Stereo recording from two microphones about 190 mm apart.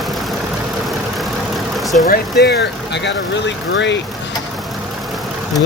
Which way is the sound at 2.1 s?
60° left (ahead or behind).